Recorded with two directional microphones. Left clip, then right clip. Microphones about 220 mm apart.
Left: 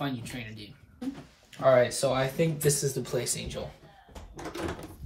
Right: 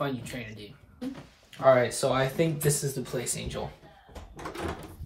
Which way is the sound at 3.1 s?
15° left (ahead or behind).